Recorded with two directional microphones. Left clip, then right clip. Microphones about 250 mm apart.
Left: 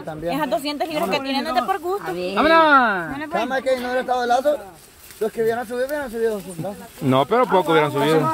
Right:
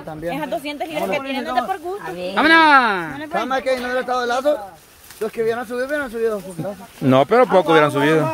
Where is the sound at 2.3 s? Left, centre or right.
Right.